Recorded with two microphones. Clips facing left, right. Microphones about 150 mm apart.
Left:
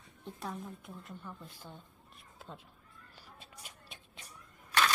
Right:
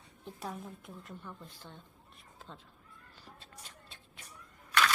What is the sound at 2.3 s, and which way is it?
Cat, 10° left (ahead or behind).